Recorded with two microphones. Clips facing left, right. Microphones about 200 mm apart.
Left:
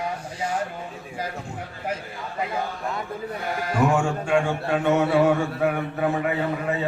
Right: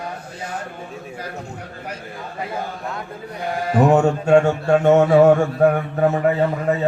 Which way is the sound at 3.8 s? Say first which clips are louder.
Right 7 dB; 40° right (ahead or behind).